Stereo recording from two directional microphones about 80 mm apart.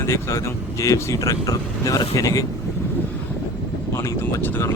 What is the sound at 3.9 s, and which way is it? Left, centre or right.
Speech, left.